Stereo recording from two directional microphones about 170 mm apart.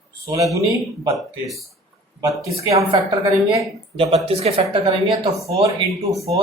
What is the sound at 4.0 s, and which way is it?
Speech, 35° right (ahead or behind).